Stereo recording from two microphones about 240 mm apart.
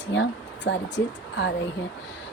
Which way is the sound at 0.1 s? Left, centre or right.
Left.